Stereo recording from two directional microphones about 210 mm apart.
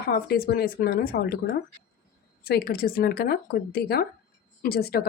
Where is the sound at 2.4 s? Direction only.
45° left (ahead or behind).